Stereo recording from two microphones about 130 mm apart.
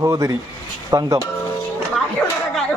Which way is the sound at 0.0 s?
25° right (ahead or behind).